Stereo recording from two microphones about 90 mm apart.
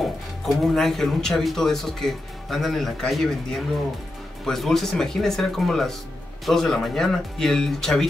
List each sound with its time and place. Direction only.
0.5 s speech: centre (ahead or behind)